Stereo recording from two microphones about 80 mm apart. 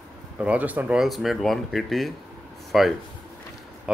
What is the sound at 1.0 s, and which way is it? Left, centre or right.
Speech, centre.